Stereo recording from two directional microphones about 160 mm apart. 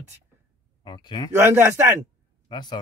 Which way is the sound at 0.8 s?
30° left (ahead or behind).